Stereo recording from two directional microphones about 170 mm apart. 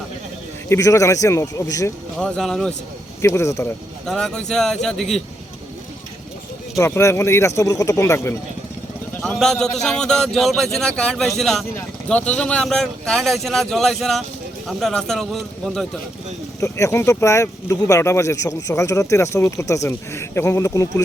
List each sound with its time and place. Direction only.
0.7 s speech: 20° left (ahead or behind)
2.1 s speech: 5° left (ahead or behind)
3.2 s speech: 15° left (ahead or behind)
4.0 s speech: 5° left (ahead or behind)
6.7 s speech: 15° left (ahead or behind)
9.2 s speech: 5° left (ahead or behind)
16.6 s speech: 20° left (ahead or behind)